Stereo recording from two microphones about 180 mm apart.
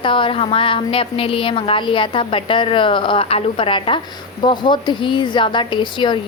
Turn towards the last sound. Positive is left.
turn(degrees=25)  # may be behind; listen again after turning